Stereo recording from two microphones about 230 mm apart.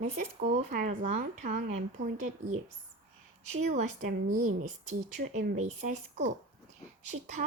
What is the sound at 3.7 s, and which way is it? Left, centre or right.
Speech, right.